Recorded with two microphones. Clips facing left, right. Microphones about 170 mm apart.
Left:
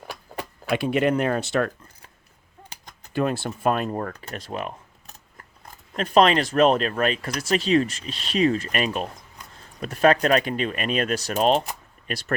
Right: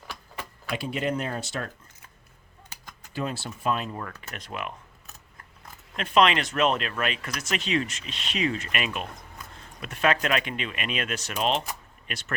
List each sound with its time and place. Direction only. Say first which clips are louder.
0.1 s tick-tock: left 5 dB; 45° left (ahead or behind)
0.7 s speech: left 7 dB; 65° left (ahead or behind)
3.1 s speech: left 7 dB; 55° left (ahead or behind)
3.9 s speech: left 7 dB; 35° left (ahead or behind)
6.0 s speech: left 4 dB; 40° left (ahead or behind)